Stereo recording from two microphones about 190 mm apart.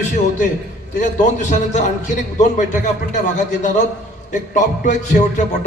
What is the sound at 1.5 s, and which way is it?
A man's voice, 40° left (ahead or behind).